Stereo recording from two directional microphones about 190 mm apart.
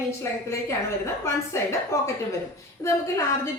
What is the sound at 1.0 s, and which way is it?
A woman's voice, 15° left (ahead or behind).